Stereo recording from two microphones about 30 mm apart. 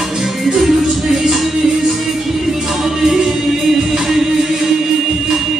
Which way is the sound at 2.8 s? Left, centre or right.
Centre.